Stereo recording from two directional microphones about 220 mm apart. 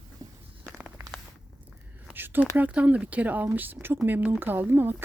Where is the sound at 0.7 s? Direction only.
5° right (ahead or behind).